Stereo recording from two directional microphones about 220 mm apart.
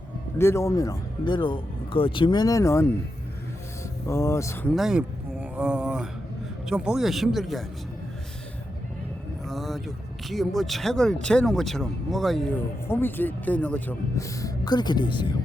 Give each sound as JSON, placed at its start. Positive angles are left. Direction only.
{"t": 0.3, "sound": "speech", "side_deg": 10}
{"t": 4.0, "sound": "speech", "side_deg": 15}
{"t": 4.7, "sound": "speech", "side_deg": 0}
{"t": 9.5, "sound": "speech", "side_deg": 0}